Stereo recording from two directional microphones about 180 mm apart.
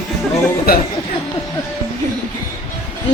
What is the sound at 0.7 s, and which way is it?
Speech, 55° left (ahead or behind).